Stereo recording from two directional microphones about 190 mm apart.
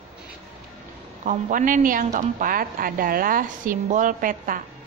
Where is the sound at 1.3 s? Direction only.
45° right (ahead or behind).